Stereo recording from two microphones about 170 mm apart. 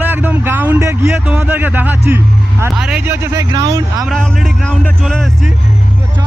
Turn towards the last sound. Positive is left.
turn(degrees=0)  # may be behind; listen again after turning